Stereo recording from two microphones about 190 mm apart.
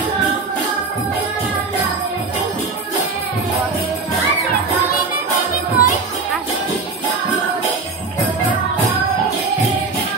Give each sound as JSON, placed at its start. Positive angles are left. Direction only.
{"t": 5.1, "sound": "music", "side_deg": 45}